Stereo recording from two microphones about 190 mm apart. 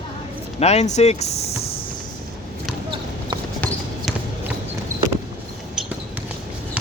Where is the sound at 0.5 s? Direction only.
35° left (ahead or behind).